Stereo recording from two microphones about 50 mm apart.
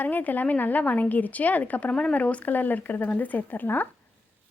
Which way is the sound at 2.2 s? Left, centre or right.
Left.